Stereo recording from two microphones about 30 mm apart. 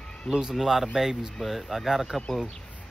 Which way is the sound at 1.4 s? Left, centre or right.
Centre.